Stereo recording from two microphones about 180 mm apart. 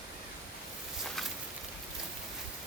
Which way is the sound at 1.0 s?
Centre (ahead or behind).